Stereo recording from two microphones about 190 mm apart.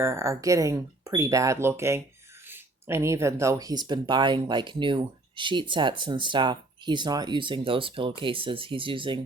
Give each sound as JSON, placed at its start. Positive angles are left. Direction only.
{"t": 0.0, "sound": "speech", "side_deg": -15}